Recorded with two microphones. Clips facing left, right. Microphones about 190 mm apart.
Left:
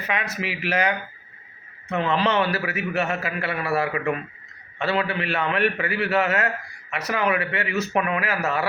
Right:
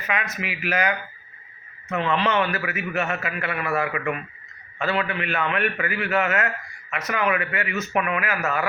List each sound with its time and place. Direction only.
0.1 s a man's voice: 35° left (ahead or behind)